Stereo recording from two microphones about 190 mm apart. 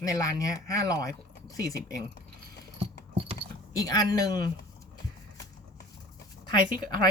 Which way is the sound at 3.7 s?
20° left (ahead or behind).